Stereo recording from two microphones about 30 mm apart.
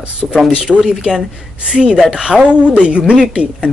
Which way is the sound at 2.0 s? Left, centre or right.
Right.